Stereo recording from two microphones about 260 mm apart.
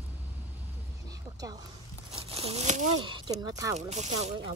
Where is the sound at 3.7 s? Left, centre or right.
Right.